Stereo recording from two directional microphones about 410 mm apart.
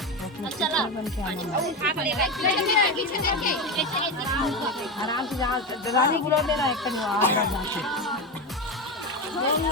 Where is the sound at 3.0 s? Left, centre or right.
Left.